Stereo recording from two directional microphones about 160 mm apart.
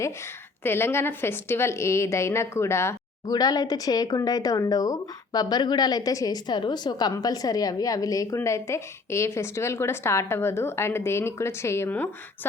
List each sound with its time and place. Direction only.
0.6 s a woman's voice: 15° left (ahead or behind)